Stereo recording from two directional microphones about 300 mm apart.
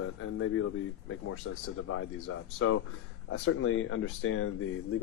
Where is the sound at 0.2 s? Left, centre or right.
Left.